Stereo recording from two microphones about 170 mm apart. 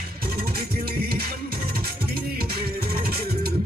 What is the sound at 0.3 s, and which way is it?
Music, 65° right (ahead or behind).